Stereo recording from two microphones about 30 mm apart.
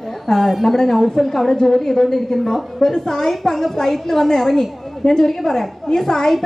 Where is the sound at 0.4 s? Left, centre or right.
Centre.